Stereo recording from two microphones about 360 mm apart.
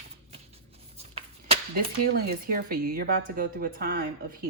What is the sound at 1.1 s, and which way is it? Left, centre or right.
Speech, right.